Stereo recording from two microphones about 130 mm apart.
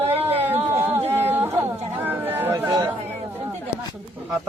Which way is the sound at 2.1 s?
15° right (ahead or behind).